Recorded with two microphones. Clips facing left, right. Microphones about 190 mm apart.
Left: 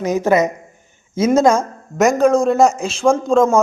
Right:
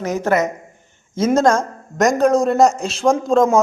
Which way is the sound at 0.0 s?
15° left (ahead or behind).